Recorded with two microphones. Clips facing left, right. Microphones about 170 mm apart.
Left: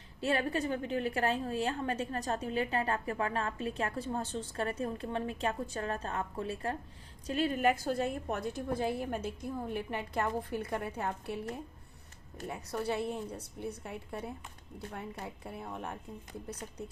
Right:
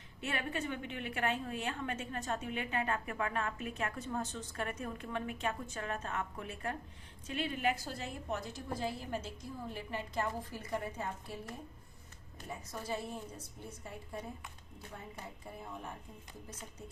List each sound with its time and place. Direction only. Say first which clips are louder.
0.2 s a woman's voice: left 7 dB; 35° left (ahead or behind); by 11.3 s 65° left (ahead or behind)
12.5 s a woman's voice: left 6 dB; 65° left (ahead or behind)